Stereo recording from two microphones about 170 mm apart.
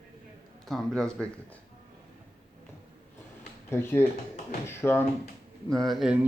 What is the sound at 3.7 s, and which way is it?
Speech, 15° left (ahead or behind).